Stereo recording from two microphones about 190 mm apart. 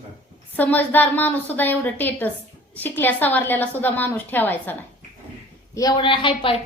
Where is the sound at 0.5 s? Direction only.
10° left (ahead or behind).